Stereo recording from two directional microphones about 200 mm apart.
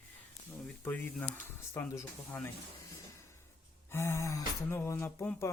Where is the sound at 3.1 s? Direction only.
15° left (ahead or behind).